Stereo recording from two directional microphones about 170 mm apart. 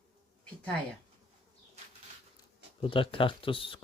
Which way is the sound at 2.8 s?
30° left (ahead or behind).